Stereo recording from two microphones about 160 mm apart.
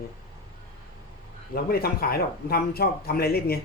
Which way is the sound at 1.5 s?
75° left (ahead or behind).